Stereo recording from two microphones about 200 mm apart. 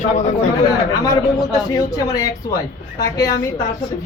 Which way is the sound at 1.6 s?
15° left (ahead or behind).